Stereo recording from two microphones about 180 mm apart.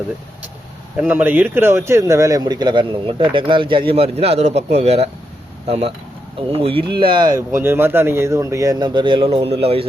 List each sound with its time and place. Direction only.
0.9 s speech: 10° right (ahead or behind); by 9.8 s 35° right (ahead or behind)